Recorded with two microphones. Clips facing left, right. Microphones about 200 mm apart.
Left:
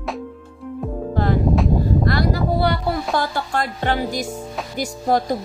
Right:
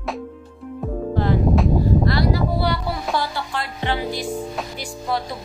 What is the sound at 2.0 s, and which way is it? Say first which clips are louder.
Music: even; 50° left (ahead or behind).